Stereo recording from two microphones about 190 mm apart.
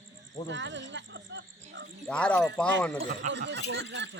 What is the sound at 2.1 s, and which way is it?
Speech, 5° left (ahead or behind).